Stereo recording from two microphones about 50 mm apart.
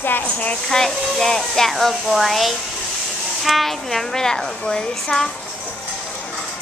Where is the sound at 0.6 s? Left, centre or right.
Centre.